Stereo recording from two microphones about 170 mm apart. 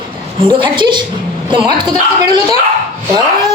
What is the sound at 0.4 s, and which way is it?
Speech, 30° right (ahead or behind).